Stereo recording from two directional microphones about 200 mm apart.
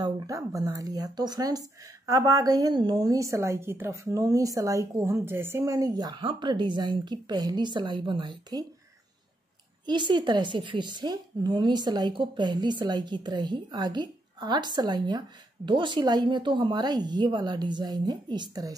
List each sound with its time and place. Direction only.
0.0 s speech: 15° right (ahead or behind)
9.8 s a woman's voice: 25° right (ahead or behind)